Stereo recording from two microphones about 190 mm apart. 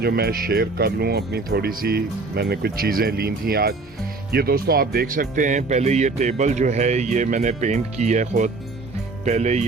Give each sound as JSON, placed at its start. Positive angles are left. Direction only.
{"t": 0.0, "sound": "speech", "side_deg": -55}